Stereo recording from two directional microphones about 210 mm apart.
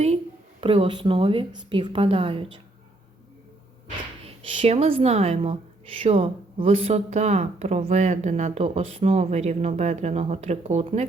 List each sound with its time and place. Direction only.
0.6 s a woman's voice: 25° right (ahead or behind)
4.4 s a woman's voice: 30° right (ahead or behind)